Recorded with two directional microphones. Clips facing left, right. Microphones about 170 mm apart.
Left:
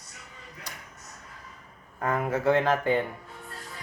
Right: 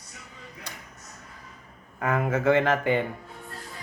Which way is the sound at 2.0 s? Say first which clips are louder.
Right 2 dB; 85° right.